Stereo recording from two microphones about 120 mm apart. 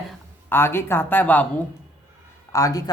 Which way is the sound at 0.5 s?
20° left (ahead or behind).